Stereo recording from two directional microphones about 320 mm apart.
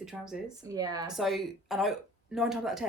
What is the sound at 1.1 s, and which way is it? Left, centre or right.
A woman's voice, centre.